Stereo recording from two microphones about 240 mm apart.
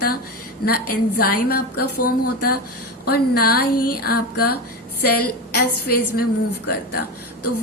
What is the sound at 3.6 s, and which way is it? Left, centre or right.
Music, left.